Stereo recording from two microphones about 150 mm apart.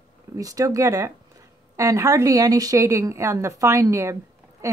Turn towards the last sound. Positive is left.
turn(degrees=-20)  # may be behind; listen again after turning